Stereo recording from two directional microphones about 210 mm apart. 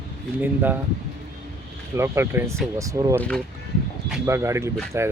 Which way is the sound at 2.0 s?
10° right (ahead or behind).